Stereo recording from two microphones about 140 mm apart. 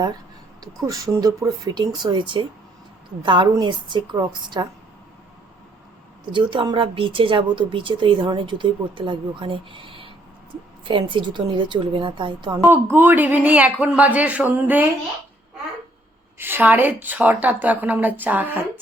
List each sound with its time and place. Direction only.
0.9 s speech: 25° right (ahead or behind)
6.3 s speech: 35° right (ahead or behind)
10.8 s speech: 35° right (ahead or behind)
12.6 s a woman's voice: 15° right (ahead or behind)
16.4 s a woman's voice: 15° right (ahead or behind)